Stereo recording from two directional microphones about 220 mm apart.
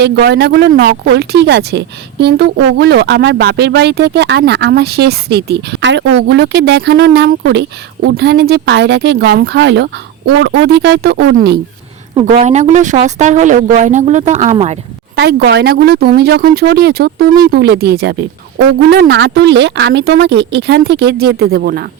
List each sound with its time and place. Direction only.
0.0 s speech: 50° right (ahead or behind)
12.2 s speech: 30° right (ahead or behind)
15.1 s speech: 50° right (ahead or behind)